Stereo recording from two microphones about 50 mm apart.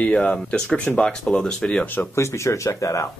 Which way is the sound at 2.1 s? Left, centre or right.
Left.